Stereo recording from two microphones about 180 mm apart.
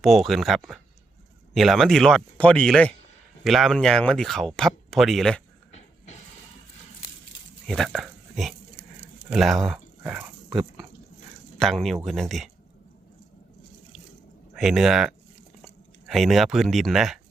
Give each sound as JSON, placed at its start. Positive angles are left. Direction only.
{"t": 0.0, "sound": "speech", "side_deg": 0}
{"t": 7.7, "sound": "speech", "side_deg": 0}
{"t": 11.5, "sound": "speech", "side_deg": 0}
{"t": 14.5, "sound": "speech", "side_deg": 0}